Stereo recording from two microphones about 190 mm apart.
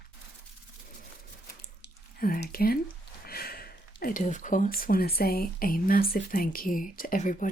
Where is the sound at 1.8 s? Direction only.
50° left (ahead or behind).